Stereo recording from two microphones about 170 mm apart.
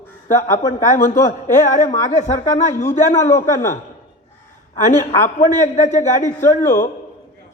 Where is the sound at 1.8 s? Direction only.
20° left (ahead or behind).